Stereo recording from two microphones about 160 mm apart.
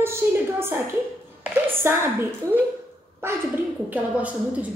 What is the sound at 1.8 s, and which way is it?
Speech, 15° right (ahead or behind).